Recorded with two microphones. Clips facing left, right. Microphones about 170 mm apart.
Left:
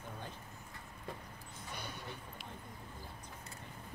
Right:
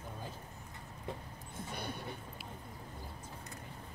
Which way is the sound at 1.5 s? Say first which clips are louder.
Right 5 dB; 55° right (ahead or behind).